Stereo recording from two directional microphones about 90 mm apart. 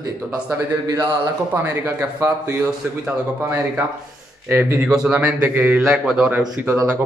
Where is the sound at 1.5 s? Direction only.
25° right (ahead or behind).